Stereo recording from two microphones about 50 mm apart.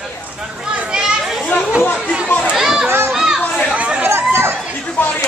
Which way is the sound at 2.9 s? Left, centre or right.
Right.